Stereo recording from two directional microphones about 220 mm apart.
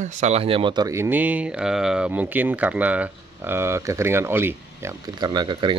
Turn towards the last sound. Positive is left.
turn(degrees=-20)  # may be behind; listen again after turning